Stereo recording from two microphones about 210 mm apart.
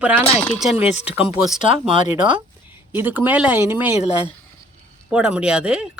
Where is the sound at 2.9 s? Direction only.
10° right (ahead or behind).